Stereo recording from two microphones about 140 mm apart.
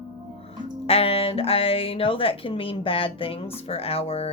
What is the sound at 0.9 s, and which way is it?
A woman's voice, 45° left (ahead or behind).